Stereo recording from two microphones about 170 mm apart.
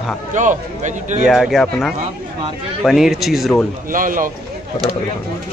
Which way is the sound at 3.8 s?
55° right (ahead or behind).